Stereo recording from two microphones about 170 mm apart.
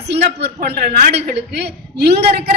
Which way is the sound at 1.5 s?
75° right (ahead or behind).